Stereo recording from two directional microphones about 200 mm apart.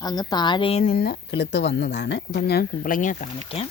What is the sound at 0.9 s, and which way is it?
Speech, 50° left (ahead or behind).